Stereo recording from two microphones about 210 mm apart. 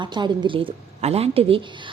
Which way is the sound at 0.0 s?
20° right (ahead or behind).